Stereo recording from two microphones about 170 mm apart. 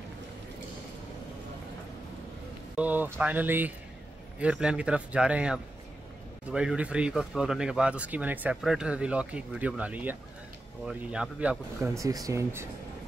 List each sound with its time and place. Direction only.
2.7 s speech: 10° right (ahead or behind)